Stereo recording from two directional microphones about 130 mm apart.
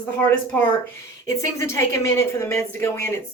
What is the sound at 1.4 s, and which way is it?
Speech, 20° left (ahead or behind).